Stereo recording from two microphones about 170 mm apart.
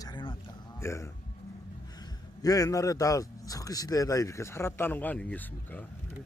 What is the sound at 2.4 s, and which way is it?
A man's voice, 20° left (ahead or behind).